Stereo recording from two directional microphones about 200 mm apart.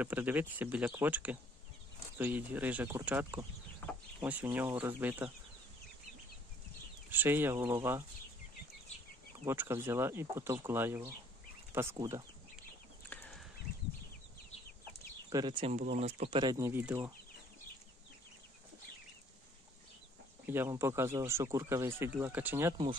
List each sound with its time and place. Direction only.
0.0 s speech: 10° right (ahead or behind)
3.8 s chicken: 10° left (ahead or behind)
4.2 s speech: 10° right (ahead or behind)
7.1 s speech: 10° right (ahead or behind)
9.5 s speech: 10° right (ahead or behind)
13.1 s a sound: 10° left (ahead or behind)
15.2 s speech: 20° right (ahead or behind)
16.5 s speech: 10° right (ahead or behind)
20.4 s speech: 10° right (ahead or behind)